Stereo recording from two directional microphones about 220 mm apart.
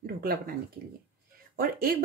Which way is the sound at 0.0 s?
40° right (ahead or behind).